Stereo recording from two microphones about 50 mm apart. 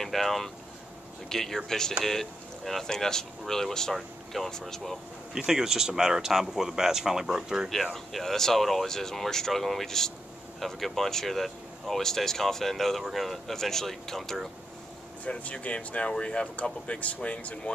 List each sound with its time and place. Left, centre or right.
0.0 s speech: centre
5.3 s speech: centre
7.9 s speech: centre
15.2 s speech: left